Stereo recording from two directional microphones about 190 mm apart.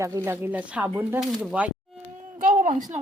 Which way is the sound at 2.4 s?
40° right (ahead or behind).